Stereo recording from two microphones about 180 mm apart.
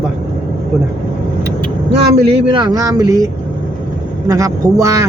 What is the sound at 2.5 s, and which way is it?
Speech, 20° right (ahead or behind).